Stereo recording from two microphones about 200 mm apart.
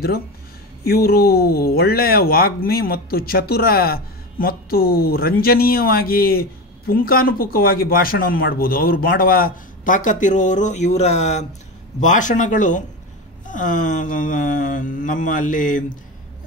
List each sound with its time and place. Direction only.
0.8 s speech: 50° left (ahead or behind); by 11.4 s 35° left (ahead or behind)
12.0 s mantra: 40° left (ahead or behind)